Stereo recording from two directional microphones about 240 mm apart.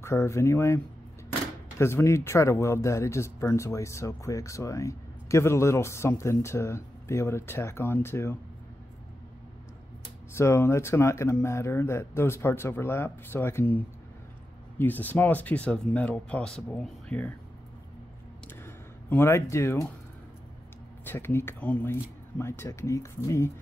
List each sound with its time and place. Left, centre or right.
0.0 s speech: centre
1.8 s speech: centre
10.3 s speech: centre
14.8 s speech: centre
19.0 s speech: centre
21.0 s speech: centre